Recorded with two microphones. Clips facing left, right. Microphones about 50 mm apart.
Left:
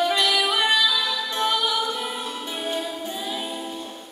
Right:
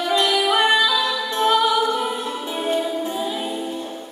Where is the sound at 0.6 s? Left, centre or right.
Right.